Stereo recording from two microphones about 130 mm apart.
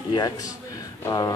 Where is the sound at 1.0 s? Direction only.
30° left (ahead or behind).